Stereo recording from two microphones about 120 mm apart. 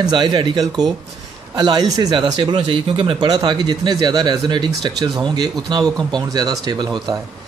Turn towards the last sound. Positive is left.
turn(degrees=-35)  # may be behind; listen again after turning